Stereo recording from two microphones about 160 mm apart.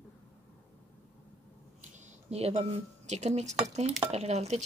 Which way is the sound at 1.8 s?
45° right (ahead or behind).